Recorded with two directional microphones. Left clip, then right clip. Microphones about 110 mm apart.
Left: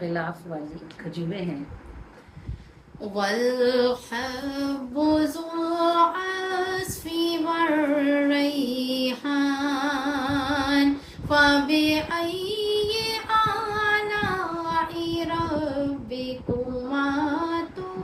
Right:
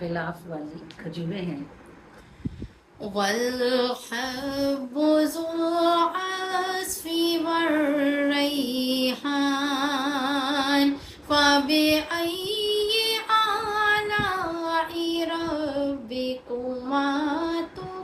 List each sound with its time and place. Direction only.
0.0 s speech: 5° left (ahead or behind)
3.2 s female singing: 40° right (ahead or behind)
11.3 s child singing: 40° right (ahead or behind)
16.9 s music: 40° right (ahead or behind)